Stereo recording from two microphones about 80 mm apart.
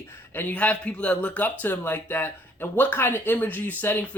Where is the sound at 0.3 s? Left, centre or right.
Centre.